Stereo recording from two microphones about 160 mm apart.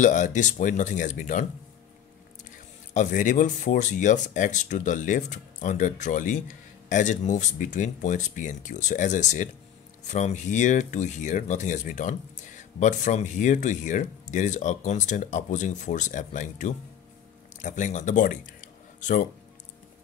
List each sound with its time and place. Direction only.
0.0 s speech: 55° left (ahead or behind)
2.9 s speech: 55° left (ahead or behind)